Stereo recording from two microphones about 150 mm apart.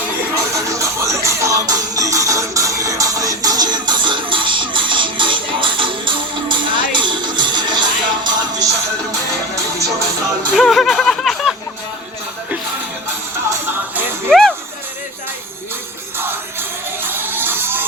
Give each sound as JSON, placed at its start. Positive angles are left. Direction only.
{"t": 0.5, "sound": "music", "side_deg": -20}
{"t": 10.5, "sound": "music", "side_deg": 0}
{"t": 14.3, "sound": "music", "side_deg": 5}
{"t": 16.1, "sound": "music", "side_deg": -15}